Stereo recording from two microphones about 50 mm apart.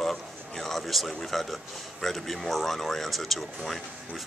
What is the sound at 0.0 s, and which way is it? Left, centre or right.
A man's voice, centre.